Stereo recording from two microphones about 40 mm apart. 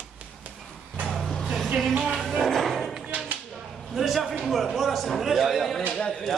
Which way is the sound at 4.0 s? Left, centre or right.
Centre.